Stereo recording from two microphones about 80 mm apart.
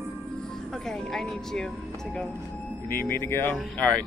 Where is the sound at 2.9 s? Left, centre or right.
Left.